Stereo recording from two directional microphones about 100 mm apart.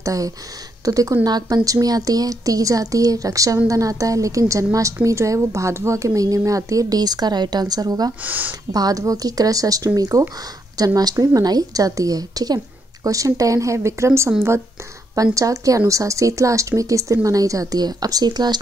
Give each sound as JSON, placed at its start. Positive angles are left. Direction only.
{"t": 0.0, "sound": "speech", "side_deg": -35}
{"t": 8.2, "sound": "speech", "side_deg": -15}
{"t": 8.7, "sound": "speech", "side_deg": -35}
{"t": 15.3, "sound": "speech", "side_deg": -35}